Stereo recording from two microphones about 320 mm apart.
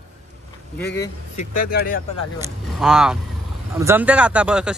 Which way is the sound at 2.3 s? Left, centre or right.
Centre.